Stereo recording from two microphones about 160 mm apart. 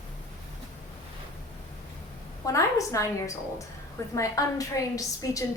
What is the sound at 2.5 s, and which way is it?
A woman's voice, 20° left (ahead or behind).